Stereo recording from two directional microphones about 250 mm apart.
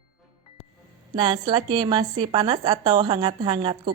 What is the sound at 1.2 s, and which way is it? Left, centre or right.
A woman's voice, centre.